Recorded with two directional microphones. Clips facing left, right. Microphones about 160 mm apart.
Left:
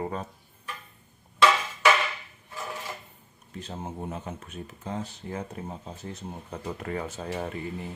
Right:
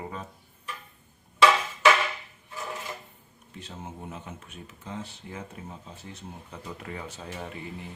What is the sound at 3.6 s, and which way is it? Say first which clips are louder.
Speech: left 5 dB; 40° left (ahead or behind).